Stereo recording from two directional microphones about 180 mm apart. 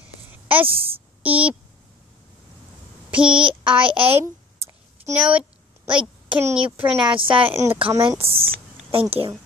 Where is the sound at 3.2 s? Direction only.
30° right (ahead or behind).